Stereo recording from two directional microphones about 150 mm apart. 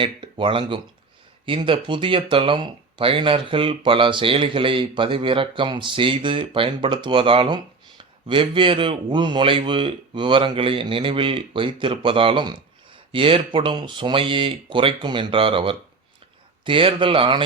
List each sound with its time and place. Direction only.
0.0 s speech: 35° right (ahead or behind)